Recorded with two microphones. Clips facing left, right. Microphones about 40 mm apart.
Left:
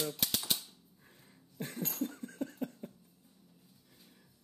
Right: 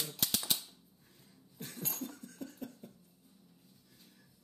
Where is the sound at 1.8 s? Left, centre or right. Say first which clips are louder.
Left 5 dB; centre.